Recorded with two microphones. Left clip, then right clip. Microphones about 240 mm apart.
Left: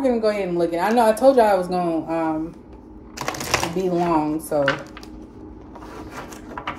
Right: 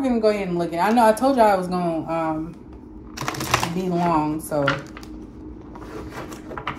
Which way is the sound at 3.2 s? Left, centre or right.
Centre.